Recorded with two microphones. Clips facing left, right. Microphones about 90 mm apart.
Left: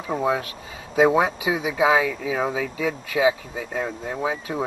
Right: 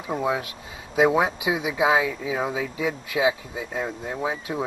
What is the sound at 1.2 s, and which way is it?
Speech, 35° left (ahead or behind).